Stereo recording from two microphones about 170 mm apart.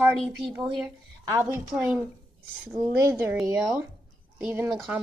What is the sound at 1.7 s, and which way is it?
A woman's voice, 5° right (ahead or behind).